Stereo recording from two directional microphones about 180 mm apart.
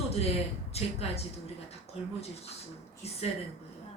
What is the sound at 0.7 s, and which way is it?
Speech, 35° left (ahead or behind).